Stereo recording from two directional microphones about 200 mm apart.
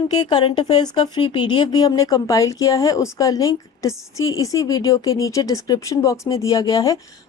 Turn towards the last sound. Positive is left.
turn(degrees=15)  # may be behind; listen again after turning